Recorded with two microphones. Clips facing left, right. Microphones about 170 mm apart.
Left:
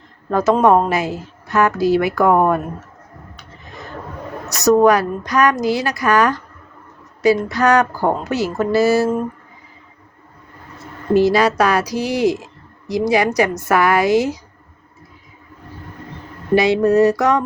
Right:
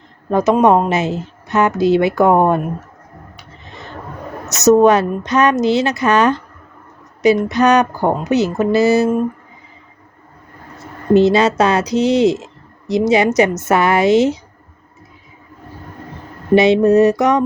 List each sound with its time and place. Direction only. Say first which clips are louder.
0.3 s a woman's voice: right 1 dB; 20° right (ahead or behind)
4.4 s a woman's voice: right 2 dB; 20° right (ahead or behind)
11.1 s a woman's voice: right 3 dB; 25° right (ahead or behind)
16.6 s a woman's voice: right 3 dB; 20° right (ahead or behind)